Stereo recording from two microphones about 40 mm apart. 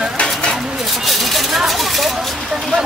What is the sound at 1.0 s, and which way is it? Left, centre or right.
Speech, centre.